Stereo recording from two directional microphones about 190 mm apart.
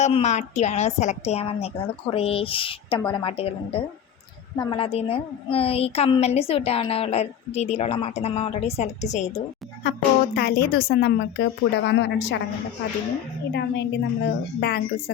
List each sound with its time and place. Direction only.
0.0 s a woman's voice: 35° left (ahead or behind)
9.8 s a woman's voice: 50° left (ahead or behind)
13.5 s a woman's voice: 65° left (ahead or behind)